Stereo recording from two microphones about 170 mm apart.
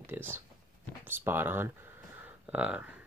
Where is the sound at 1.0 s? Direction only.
10° right (ahead or behind).